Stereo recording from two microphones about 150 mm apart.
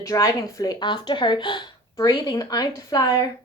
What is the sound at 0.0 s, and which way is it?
A woman's voice, 20° left (ahead or behind).